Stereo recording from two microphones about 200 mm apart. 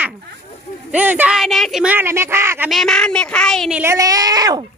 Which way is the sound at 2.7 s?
5° left (ahead or behind).